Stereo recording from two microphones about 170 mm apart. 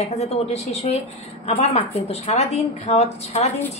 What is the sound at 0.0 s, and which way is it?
Speech, 40° left (ahead or behind).